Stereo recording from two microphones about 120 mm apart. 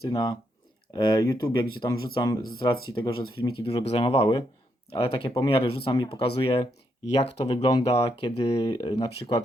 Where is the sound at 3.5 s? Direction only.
50° left (ahead or behind).